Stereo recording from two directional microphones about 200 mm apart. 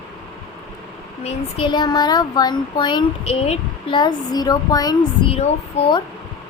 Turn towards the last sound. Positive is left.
turn(degrees=35)  # may be behind; listen again after turning